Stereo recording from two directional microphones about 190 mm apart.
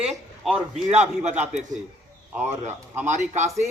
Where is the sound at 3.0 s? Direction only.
40° right (ahead or behind).